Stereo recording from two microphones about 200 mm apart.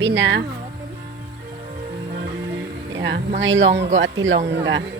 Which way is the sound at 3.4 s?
70° right (ahead or behind).